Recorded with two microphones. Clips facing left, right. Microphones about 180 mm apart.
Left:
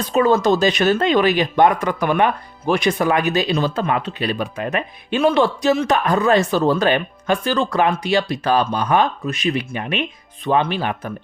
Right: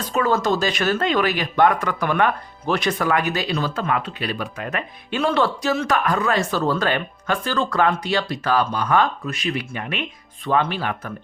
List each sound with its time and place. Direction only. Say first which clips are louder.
0.1 s speech: left 5 dB; 20° left (ahead or behind)